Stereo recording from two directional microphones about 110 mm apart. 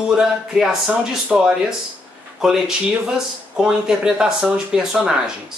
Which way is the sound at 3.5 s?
5° right (ahead or behind).